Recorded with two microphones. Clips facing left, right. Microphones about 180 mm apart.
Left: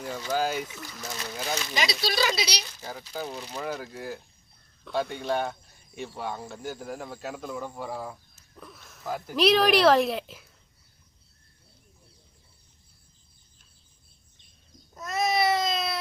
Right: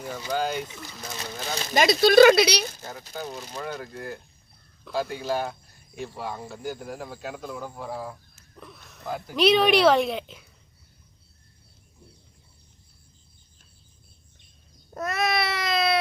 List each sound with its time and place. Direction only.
0.0 s speech: 5° right (ahead or behind)
0.3 s speech: 5° left (ahead or behind)
1.7 s speech: 50° right (ahead or behind)
3.1 s speech: centre (ahead or behind)
14.9 s baby cry: 65° right (ahead or behind)